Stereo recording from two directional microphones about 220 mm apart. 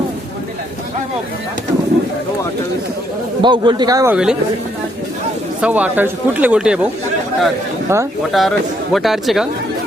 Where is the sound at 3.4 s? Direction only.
20° right (ahead or behind).